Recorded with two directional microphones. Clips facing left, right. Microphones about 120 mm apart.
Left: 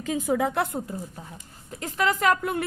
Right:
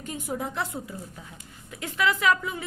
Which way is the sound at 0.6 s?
45° left (ahead or behind).